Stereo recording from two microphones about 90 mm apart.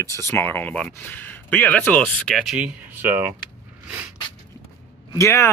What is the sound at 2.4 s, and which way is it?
Speech, 10° right (ahead or behind).